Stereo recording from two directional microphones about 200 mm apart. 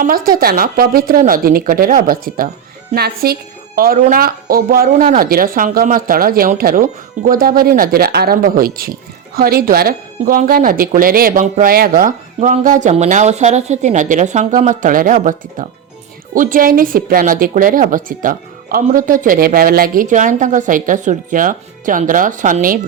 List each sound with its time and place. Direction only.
0.0 s speech: 45° right (ahead or behind)